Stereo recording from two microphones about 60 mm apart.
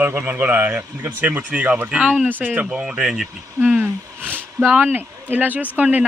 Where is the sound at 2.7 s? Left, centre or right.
Centre.